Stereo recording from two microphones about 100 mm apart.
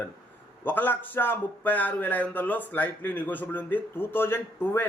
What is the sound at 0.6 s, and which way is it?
Speech, 20° left (ahead or behind).